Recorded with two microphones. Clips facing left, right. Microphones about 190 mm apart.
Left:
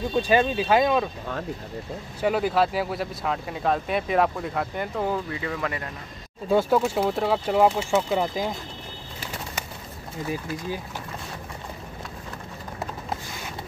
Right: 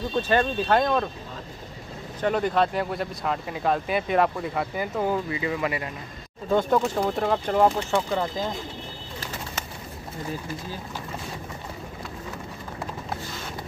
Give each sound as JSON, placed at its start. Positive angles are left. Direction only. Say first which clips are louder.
{"t": 0.1, "sound": "speech", "louder": "left 2 dB", "side_deg": 10}
{"t": 2.2, "sound": "speech", "louder": "left 1 dB", "side_deg": 5}
{"t": 6.5, "sound": "speech", "louder": "left 1 dB", "side_deg": 5}